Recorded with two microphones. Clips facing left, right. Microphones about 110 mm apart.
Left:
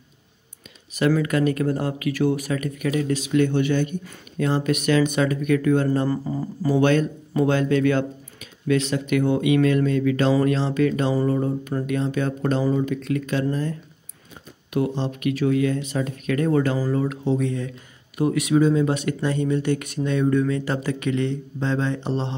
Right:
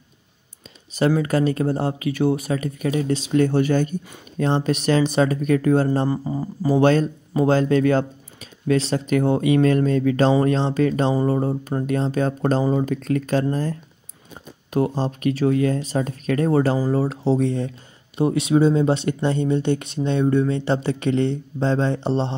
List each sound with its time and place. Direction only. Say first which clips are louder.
0.9 s speech: right 1 dB; 30° right (ahead or behind)